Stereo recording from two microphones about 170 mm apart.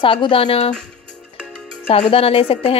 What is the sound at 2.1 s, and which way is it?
Speech, 35° left (ahead or behind).